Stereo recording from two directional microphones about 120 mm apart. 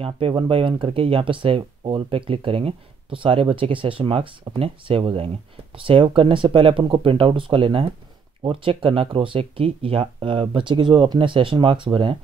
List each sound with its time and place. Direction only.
0.0 s speech: 45° right (ahead or behind)